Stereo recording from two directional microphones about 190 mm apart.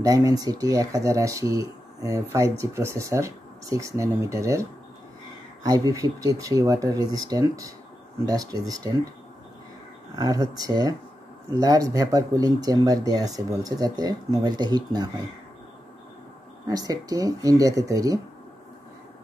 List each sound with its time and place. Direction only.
0.0 s speech: 20° right (ahead or behind)
10.1 s speech: 20° right (ahead or behind)
16.6 s speech: 20° right (ahead or behind)